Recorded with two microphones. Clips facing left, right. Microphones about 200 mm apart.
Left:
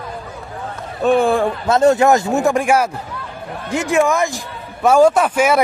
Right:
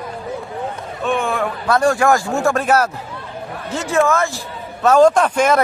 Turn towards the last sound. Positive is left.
turn(degrees=10)  # may be behind; listen again after turning